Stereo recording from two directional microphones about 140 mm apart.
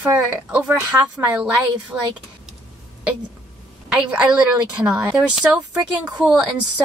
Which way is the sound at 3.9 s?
10° right (ahead or behind).